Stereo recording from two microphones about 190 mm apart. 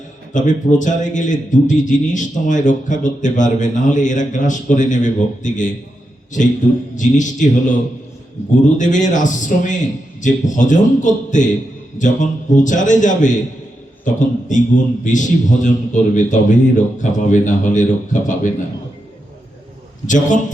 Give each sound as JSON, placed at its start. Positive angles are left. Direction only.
{"t": 0.3, "sound": "a man's voice", "side_deg": 40}
{"t": 8.8, "sound": "a man's voice", "side_deg": 40}
{"t": 20.1, "sound": "a man's voice", "side_deg": 40}